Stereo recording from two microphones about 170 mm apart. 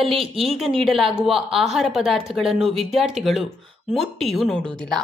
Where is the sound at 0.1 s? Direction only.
35° right (ahead or behind).